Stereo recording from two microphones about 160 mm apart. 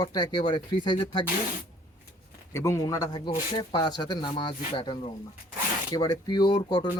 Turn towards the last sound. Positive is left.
turn(degrees=25)  # may be behind; listen again after turning